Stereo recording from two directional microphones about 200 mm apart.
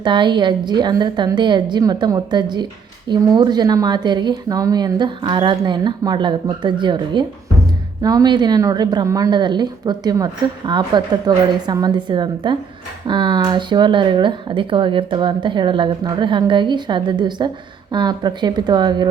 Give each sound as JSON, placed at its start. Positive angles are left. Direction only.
{"t": 0.0, "sound": "speech", "side_deg": -25}